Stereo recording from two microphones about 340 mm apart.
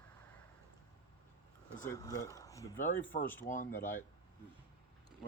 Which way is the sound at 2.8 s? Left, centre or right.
Left.